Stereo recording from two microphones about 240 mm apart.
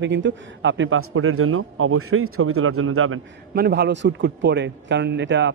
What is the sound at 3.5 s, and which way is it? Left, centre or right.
A man's voice, right.